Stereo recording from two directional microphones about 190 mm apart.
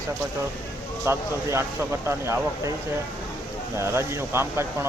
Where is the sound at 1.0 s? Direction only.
15° right (ahead or behind).